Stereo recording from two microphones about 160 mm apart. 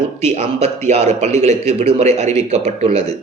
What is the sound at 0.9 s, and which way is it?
A man's voice, 45° right (ahead or behind).